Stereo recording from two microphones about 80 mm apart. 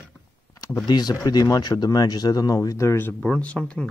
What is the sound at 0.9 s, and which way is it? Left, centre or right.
Speech, left.